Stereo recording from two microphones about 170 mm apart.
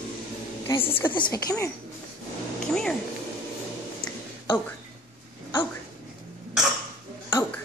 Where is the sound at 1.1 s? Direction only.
25° left (ahead or behind).